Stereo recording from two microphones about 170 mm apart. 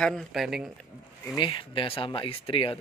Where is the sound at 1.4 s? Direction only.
30° left (ahead or behind).